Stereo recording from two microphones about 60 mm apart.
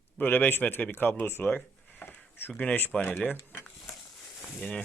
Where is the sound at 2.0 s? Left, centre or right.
Left.